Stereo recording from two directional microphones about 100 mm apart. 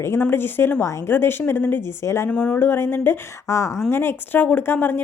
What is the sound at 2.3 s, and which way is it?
Speech, 10° left (ahead or behind).